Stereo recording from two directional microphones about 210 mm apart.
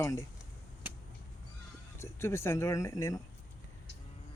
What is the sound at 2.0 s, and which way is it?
Speech, 10° left (ahead or behind).